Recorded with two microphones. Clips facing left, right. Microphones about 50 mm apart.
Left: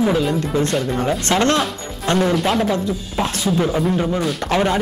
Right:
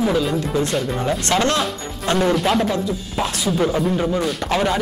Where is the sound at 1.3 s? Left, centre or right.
Centre.